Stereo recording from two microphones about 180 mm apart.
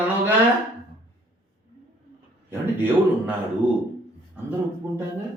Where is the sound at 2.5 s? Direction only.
15° right (ahead or behind).